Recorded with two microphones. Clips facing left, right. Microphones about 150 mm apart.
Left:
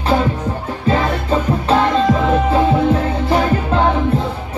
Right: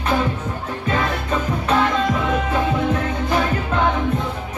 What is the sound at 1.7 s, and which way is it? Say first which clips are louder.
Music: left 5 dB; 30° left (ahead or behind).